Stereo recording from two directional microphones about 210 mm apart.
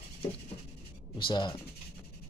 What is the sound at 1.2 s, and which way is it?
Speech, 20° left (ahead or behind).